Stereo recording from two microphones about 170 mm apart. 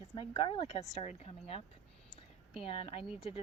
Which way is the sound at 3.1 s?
Centre (ahead or behind).